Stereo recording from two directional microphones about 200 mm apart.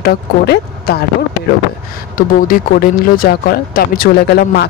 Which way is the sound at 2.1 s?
45° left (ahead or behind).